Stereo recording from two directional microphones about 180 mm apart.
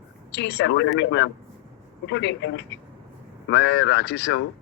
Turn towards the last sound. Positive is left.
turn(degrees=70)  # may be behind; listen again after turning